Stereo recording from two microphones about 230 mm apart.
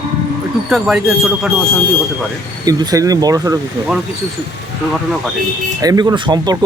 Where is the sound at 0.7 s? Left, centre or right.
Centre.